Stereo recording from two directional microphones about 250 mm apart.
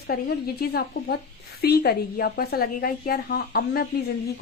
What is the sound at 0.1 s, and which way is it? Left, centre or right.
A woman's voice, left.